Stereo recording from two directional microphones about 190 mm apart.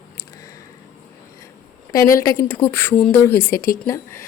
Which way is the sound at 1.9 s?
15° left (ahead or behind).